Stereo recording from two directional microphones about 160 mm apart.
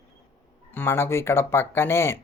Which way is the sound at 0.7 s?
15° left (ahead or behind).